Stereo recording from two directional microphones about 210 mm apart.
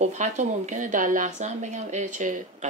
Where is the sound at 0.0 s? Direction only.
35° right (ahead or behind).